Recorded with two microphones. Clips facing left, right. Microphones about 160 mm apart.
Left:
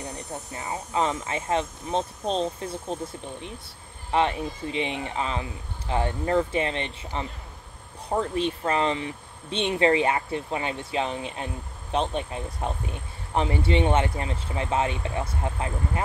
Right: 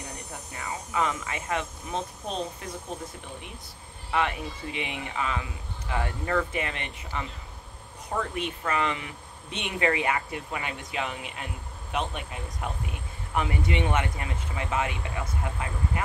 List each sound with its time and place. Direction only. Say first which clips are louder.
0.3 s speech: left 3 dB; 30° left (ahead or behind)
4.1 s speech: left 4 dB; 30° left (ahead or behind)